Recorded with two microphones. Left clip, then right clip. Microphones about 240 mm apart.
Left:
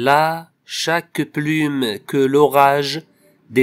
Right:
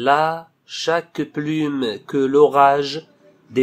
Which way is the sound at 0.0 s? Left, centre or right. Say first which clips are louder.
Left 2 dB; left.